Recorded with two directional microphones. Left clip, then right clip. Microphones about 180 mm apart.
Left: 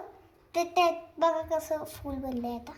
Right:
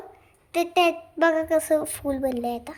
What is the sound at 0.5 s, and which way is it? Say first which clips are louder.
A woman's voice: right 4 dB; 45° right (ahead or behind).